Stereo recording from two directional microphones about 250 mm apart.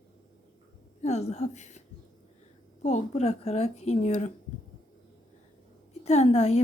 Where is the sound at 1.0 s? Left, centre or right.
Left.